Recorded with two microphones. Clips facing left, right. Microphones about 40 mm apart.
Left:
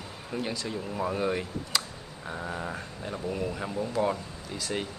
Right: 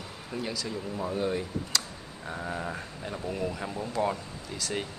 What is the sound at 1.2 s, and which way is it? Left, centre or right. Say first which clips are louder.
Speech: right 1 dB; left.